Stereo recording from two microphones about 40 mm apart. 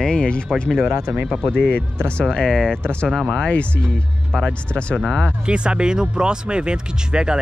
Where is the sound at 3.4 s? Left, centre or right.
Left.